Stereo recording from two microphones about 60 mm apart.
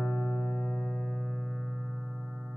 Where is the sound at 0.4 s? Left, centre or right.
Centre.